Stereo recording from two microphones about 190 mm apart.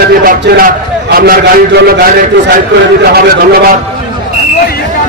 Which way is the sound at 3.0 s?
50° right (ahead or behind).